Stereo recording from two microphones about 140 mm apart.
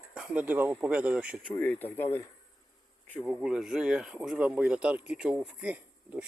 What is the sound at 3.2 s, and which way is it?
Speech, 5° right (ahead or behind).